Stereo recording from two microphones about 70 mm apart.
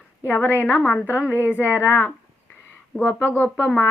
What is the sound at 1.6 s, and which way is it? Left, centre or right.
Speech, left.